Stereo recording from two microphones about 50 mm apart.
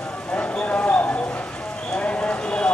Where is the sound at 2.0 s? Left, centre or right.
Left.